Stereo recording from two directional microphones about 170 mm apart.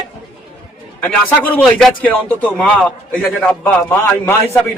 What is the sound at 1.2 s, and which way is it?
A man's voice, 10° left (ahead or behind).